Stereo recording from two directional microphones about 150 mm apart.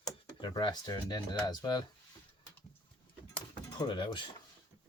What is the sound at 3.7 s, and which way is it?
Speech, 35° left (ahead or behind).